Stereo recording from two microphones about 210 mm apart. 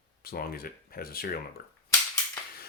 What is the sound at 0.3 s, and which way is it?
Speech, 45° left (ahead or behind).